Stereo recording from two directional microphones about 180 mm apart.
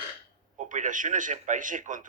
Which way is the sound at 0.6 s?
45° right (ahead or behind).